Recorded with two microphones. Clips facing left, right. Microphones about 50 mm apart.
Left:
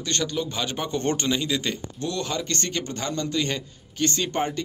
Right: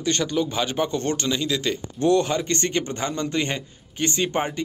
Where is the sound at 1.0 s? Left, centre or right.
Centre.